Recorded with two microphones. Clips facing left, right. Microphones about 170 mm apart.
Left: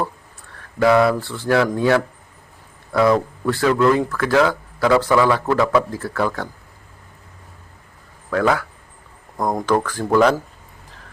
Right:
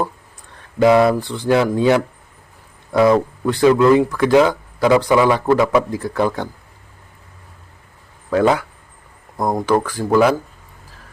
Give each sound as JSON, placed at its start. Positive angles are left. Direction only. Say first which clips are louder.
{"t": 0.8, "sound": "speech", "louder": "right 2 dB", "side_deg": -20}
{"t": 8.3, "sound": "speech", "louder": "right 3 dB", "side_deg": -20}
{"t": 9.4, "sound": "speech", "louder": "right 2 dB", "side_deg": -10}